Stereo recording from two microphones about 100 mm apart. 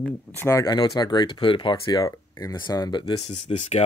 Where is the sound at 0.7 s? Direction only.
40° left (ahead or behind).